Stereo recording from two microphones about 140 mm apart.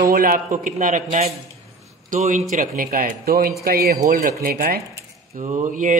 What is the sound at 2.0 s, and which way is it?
A man's voice, 65° right (ahead or behind).